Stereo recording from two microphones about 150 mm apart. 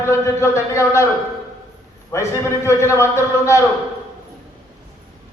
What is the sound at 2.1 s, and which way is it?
A man's voice, 20° left (ahead or behind).